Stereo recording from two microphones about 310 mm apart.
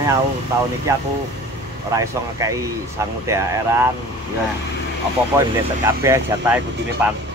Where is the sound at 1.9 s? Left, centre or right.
Centre.